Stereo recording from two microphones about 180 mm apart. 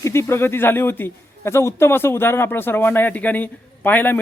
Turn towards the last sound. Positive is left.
turn(degrees=10)  # may be behind; listen again after turning